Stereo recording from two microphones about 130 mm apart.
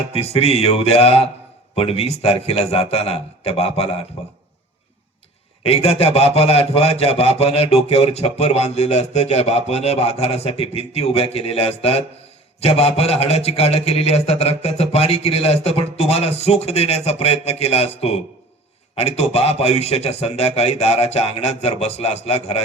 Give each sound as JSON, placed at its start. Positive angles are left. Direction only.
{"t": 0.1, "sound": "speech", "side_deg": 50}
{"t": 5.6, "sound": "speech", "side_deg": 55}